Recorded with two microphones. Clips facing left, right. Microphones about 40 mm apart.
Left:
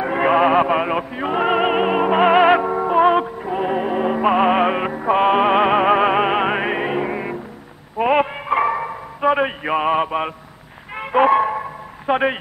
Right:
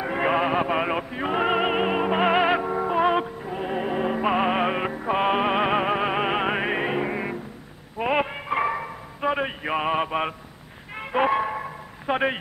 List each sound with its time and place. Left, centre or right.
0.0 s music: centre
0.7 s music: centre
3.4 s music: left
3.8 s music: centre
8.0 s a sound: centre
11.0 s a sound: centre